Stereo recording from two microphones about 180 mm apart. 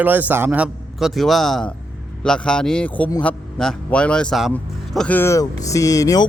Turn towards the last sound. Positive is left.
turn(degrees=20)  # may be behind; listen again after turning